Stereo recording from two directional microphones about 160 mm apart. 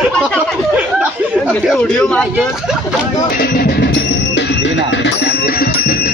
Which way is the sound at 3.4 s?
75° left (ahead or behind).